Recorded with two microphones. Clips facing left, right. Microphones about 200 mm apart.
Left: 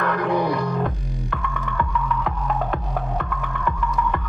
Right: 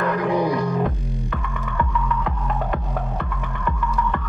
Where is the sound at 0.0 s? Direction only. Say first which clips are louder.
Right 1 dB; 10° right (ahead or behind).